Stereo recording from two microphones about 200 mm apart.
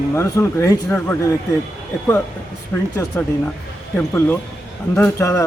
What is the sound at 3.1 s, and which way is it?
Speech, 10° left (ahead or behind).